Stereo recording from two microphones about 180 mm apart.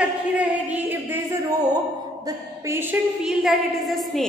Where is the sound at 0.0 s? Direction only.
5° right (ahead or behind).